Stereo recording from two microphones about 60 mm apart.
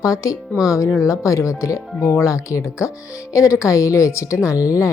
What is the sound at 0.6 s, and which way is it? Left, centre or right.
Speech, left.